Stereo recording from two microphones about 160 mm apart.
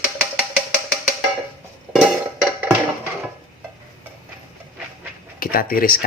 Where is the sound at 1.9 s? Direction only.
Centre (ahead or behind).